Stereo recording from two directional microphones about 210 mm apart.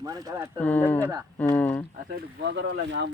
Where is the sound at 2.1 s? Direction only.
55° right (ahead or behind).